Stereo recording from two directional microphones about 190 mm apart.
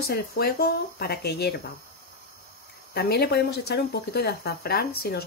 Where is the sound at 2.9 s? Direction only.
55° left (ahead or behind).